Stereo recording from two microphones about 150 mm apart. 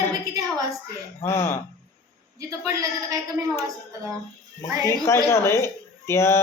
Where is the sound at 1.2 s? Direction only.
15° left (ahead or behind).